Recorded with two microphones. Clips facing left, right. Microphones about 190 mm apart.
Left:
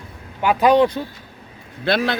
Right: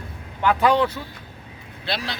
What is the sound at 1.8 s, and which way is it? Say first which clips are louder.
Speech: left 9 dB; 55° left (ahead or behind).